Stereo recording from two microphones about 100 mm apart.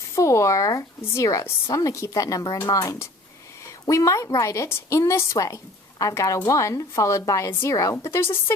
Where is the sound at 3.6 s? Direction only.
30° left (ahead or behind).